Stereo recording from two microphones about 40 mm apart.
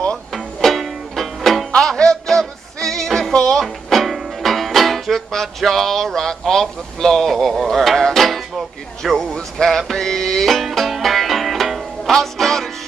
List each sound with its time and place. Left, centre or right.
0.6 s music: centre
1.8 s music: centre
3.6 s music: centre
9.9 s music: centre
10.5 s music: centre